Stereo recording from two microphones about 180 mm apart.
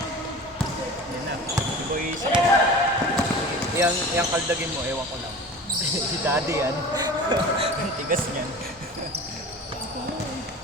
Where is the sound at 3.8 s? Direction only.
15° right (ahead or behind).